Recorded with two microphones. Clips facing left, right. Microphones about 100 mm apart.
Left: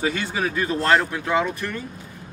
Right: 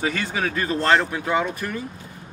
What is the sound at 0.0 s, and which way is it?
Speech, centre (ahead or behind).